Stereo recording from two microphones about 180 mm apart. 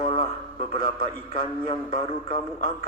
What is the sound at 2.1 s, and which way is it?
Speech, 30° left (ahead or behind).